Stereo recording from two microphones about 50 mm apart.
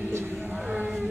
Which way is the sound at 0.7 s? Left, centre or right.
Centre.